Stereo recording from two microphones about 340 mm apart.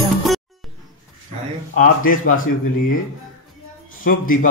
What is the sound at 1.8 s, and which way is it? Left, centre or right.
Speech, left.